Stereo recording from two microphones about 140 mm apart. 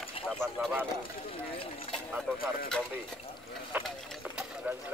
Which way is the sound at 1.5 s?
40° left (ahead or behind).